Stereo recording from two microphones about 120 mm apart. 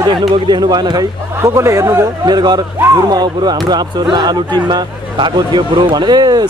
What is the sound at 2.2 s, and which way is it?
Speech, 35° right (ahead or behind).